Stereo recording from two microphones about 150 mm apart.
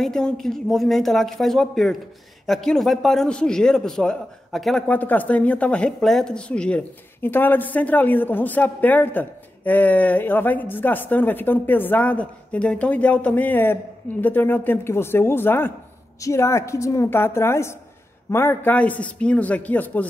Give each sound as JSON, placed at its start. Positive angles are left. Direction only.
{"t": 0.0, "sound": "a man's voice", "side_deg": 5}